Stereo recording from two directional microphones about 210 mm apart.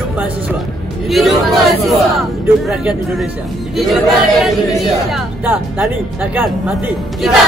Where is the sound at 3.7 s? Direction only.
Centre (ahead or behind).